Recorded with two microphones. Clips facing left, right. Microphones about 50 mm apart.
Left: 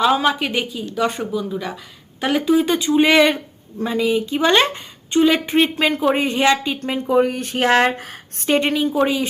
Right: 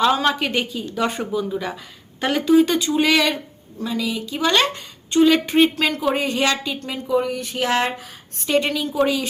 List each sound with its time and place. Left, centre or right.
0.0 s speech: centre
2.7 s speech: centre
5.2 s speech: centre
5.7 s a woman's voice: left
6.7 s speech: left
8.5 s a woman's voice: left